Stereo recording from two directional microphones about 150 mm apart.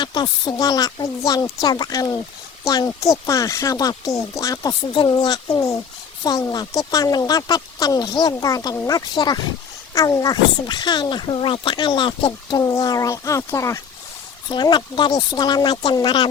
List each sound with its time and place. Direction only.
0.0 s speech: 30° left (ahead or behind)
14.5 s speech: 30° left (ahead or behind)